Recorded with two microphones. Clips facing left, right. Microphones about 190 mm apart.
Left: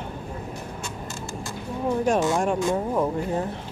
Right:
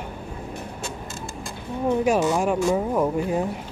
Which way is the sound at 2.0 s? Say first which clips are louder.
Even; 5° right (ahead or behind).